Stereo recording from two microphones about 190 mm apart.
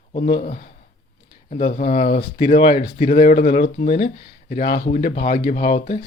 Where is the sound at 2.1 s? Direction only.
30° left (ahead or behind).